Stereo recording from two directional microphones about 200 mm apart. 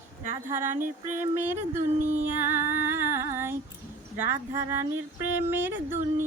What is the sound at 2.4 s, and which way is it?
Music, 10° right (ahead or behind).